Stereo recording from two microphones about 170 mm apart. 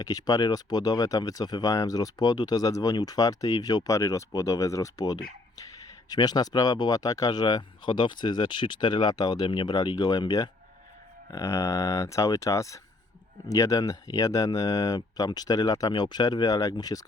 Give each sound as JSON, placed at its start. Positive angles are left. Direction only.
{"t": 0.0, "sound": "speech", "side_deg": 20}